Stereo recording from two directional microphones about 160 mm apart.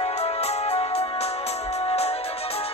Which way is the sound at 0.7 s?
40° left (ahead or behind).